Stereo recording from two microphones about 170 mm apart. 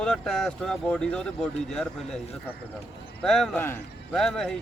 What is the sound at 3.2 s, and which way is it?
Speech, centre (ahead or behind).